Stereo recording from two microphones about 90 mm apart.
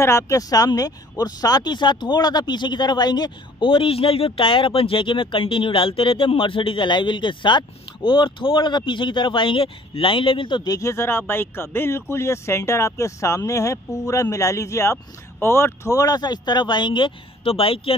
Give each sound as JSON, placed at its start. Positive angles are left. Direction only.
{"t": 0.0, "sound": "speech", "side_deg": 35}
{"t": 10.8, "sound": "speech", "side_deg": 30}
{"t": 15.9, "sound": "speech", "side_deg": 40}